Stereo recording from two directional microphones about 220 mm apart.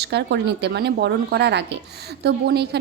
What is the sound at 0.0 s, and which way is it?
A woman's voice, 50° right (ahead or behind).